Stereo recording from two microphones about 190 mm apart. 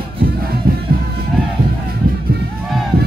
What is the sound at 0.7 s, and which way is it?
Music, 50° right (ahead or behind).